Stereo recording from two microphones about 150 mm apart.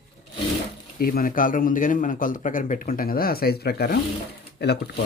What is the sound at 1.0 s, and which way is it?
A man's voice, 75° left (ahead or behind).